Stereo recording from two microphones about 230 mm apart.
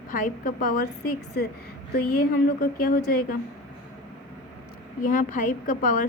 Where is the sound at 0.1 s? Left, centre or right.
Left.